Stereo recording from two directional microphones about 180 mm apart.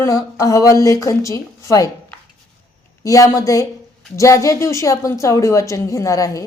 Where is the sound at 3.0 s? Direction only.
20° left (ahead or behind).